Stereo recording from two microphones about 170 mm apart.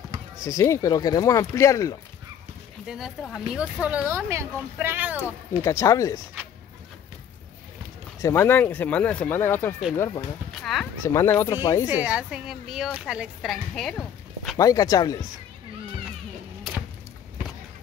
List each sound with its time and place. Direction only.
0.4 s speech: 20° left (ahead or behind)
2.9 s speech: centre (ahead or behind)
5.6 s speech: 20° left (ahead or behind)
8.2 s speech: 15° left (ahead or behind)
10.5 s speech: centre (ahead or behind)
11.1 s speech: 15° left (ahead or behind)
11.9 s speech: 5° right (ahead or behind)
14.6 s speech: 20° left (ahead or behind)